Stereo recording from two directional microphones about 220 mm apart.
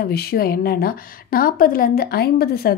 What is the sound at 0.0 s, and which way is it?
A woman's voice, 45° left (ahead or behind).